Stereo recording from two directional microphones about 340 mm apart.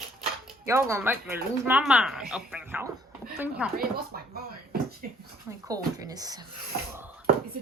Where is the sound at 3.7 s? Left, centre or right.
Right.